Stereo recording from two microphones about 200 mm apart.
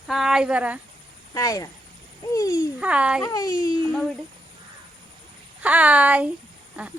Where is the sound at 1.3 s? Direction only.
15° left (ahead or behind).